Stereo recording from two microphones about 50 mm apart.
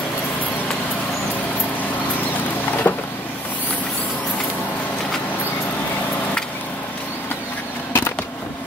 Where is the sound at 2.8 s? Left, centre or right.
Left.